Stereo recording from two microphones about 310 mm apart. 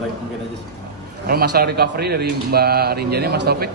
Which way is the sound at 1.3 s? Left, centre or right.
Right.